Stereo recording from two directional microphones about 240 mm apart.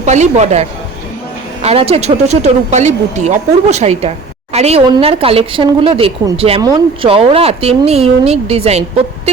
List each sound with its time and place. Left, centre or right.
0.0 s speech: right